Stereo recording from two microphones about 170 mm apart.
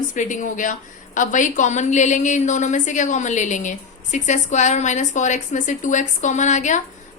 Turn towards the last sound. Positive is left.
turn(degrees=45)  # may be behind; listen again after turning